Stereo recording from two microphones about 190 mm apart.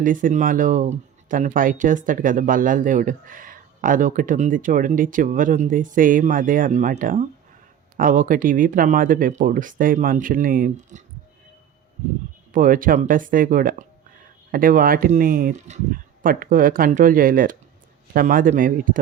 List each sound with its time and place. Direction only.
0.0 s speech: 45° right (ahead or behind)
12.5 s speech: 45° right (ahead or behind)